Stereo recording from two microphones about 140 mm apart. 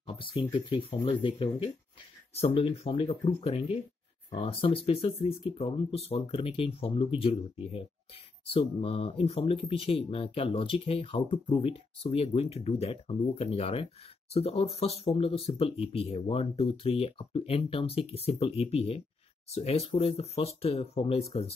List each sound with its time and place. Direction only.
0.0 s speech: 40° left (ahead or behind)